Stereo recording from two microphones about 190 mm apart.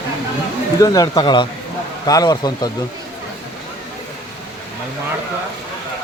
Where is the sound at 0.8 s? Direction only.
20° left (ahead or behind).